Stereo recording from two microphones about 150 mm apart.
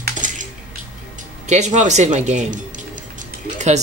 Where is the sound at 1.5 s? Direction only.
50° right (ahead or behind).